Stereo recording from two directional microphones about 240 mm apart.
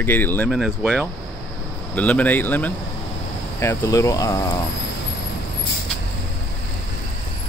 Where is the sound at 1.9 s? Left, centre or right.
Centre.